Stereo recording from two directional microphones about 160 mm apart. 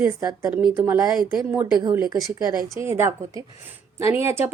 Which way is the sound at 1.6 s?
25° right (ahead or behind).